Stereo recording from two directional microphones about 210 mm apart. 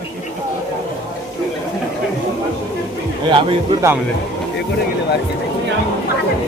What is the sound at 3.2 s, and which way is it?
Speech, 25° right (ahead or behind).